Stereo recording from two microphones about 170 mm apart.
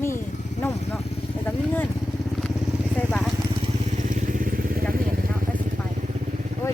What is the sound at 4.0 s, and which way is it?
Vehicle, 50° right (ahead or behind).